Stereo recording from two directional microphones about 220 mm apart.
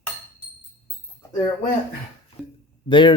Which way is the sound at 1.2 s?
15° left (ahead or behind).